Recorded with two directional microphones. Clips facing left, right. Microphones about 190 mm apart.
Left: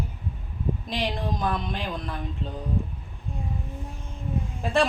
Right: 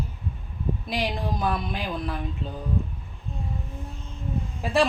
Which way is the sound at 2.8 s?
15° left (ahead or behind).